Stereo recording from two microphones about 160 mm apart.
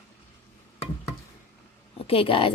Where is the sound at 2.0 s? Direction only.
35° left (ahead or behind).